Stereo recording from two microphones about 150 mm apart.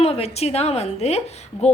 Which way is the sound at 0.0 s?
45° left (ahead or behind).